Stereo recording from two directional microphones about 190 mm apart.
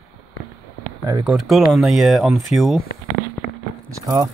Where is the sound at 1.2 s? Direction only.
Centre (ahead or behind).